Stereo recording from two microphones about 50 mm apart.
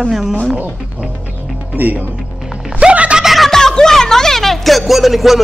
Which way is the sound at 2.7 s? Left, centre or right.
Right.